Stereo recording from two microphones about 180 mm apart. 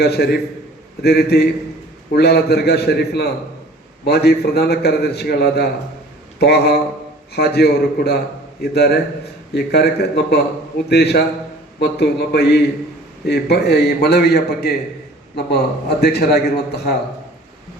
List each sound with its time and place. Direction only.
0.0 s a man's voice: 65° left (ahead or behind)